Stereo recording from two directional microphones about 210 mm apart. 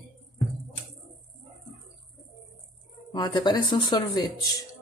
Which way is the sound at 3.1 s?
20° left (ahead or behind).